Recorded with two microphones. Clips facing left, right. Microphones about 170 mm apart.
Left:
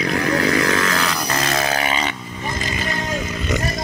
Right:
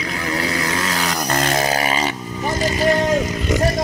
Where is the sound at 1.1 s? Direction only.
45° right (ahead or behind).